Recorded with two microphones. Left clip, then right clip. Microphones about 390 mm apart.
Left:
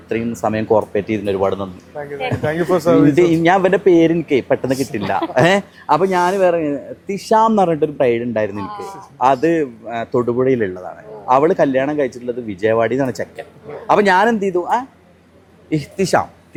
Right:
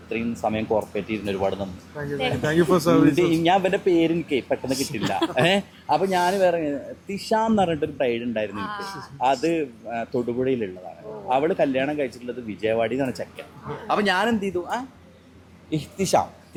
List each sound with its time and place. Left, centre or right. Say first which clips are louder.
0.1 s speech: left 6 dB; left
2.4 s speech: left 4 dB; centre
3.4 s speech: left 7 dB; left
15.7 s speech: left 5 dB; left